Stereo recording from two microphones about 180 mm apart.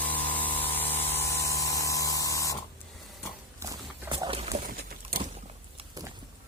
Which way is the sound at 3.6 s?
20° right (ahead or behind).